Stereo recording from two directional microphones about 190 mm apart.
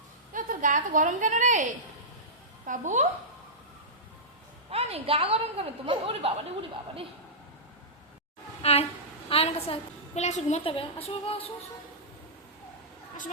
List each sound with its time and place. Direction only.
0.3 s a woman's voice: 45° right (ahead or behind)
2.6 s a woman's voice: 40° right (ahead or behind)
4.7 s a woman's voice: 30° right (ahead or behind)
8.6 s a woman's voice: 30° left (ahead or behind)